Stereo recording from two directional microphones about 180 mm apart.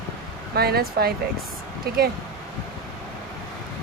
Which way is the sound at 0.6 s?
60° right (ahead or behind).